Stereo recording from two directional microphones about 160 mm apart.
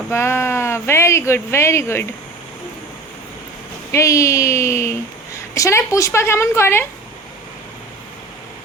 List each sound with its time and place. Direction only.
0.1 s speech: 15° left (ahead or behind)
3.9 s speech: 20° left (ahead or behind)